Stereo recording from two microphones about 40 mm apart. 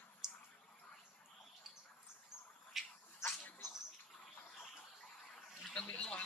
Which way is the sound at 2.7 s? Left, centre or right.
Centre.